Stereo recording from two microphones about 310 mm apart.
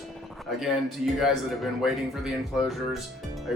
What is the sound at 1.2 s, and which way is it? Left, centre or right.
Speech, centre.